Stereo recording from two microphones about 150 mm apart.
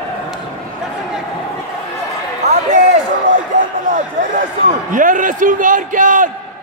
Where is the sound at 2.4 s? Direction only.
50° right (ahead or behind).